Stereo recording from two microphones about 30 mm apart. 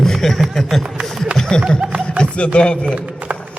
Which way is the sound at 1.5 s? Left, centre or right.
Left.